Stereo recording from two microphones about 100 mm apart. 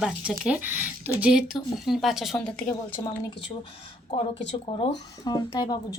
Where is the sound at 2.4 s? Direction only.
15° left (ahead or behind).